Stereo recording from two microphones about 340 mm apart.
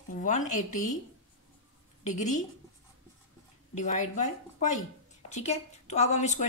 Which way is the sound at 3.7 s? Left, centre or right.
Left.